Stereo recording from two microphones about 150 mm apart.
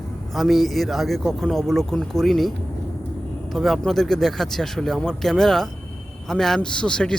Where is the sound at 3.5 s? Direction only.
Centre (ahead or behind).